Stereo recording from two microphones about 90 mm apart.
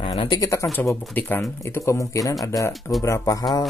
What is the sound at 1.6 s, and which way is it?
Speech, 35° left (ahead or behind).